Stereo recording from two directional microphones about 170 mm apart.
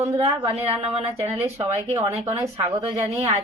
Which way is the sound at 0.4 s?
35° right (ahead or behind).